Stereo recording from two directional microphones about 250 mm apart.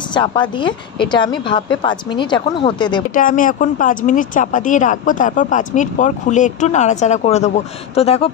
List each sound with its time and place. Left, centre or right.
0.1 s a woman's voice: centre
3.2 s speech: left